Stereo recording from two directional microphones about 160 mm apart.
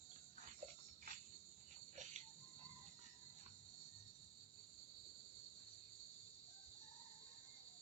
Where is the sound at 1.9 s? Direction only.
50° right (ahead or behind).